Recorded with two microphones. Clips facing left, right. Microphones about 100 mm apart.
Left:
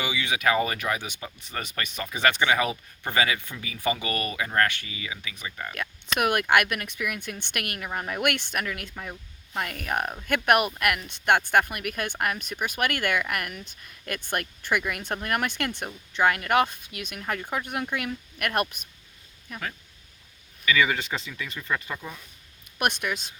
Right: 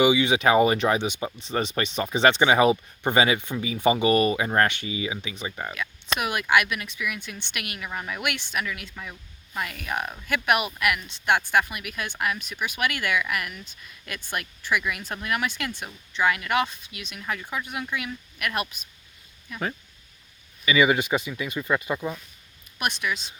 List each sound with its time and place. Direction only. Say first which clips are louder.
0.0 s speech: right 7 dB; 20° right (ahead or behind)
6.1 s speech: left 1 dB; 55° left (ahead or behind)
20.7 s speech: right 4 dB; 15° right (ahead or behind)
22.8 s speech: left 1 dB; 55° left (ahead or behind)